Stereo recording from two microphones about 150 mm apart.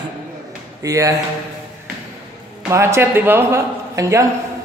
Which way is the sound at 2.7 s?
20° right (ahead or behind).